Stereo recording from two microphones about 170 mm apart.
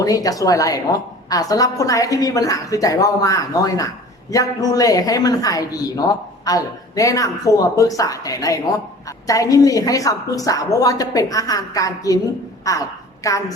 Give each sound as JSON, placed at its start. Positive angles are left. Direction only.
{"t": 0.0, "sound": "speech", "side_deg": 20}